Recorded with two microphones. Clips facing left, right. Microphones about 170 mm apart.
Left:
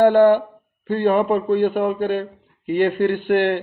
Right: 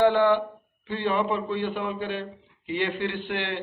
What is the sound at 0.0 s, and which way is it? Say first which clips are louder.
Speech: left 7 dB; 50° left (ahead or behind).